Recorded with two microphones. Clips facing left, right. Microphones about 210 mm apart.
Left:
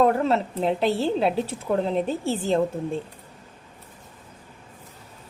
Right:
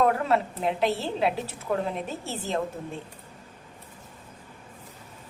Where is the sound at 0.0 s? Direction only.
30° left (ahead or behind).